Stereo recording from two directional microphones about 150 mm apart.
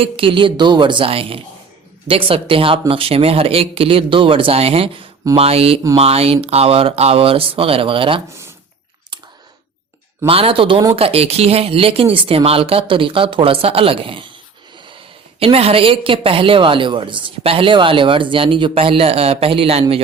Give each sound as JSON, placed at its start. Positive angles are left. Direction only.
{"t": 0.0, "sound": "a woman's voice", "side_deg": -35}
{"t": 10.2, "sound": "a woman's voice", "side_deg": -40}
{"t": 15.4, "sound": "a woman's voice", "side_deg": -40}